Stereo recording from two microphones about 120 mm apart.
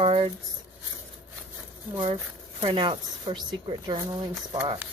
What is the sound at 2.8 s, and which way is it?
Speech, 40° right (ahead or behind).